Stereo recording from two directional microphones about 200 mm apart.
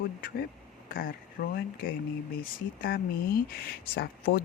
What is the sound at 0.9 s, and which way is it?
Speech, 45° left (ahead or behind).